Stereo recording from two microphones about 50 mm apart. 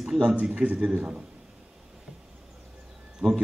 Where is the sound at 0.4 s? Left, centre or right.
Right.